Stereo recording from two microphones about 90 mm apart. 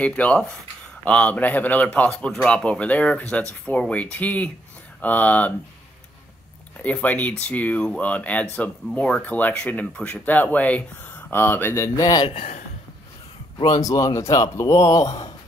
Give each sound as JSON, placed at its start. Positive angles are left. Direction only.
{"t": 0.0, "sound": "speech", "side_deg": 15}
{"t": 6.8, "sound": "speech", "side_deg": 15}
{"t": 13.7, "sound": "speech", "side_deg": 40}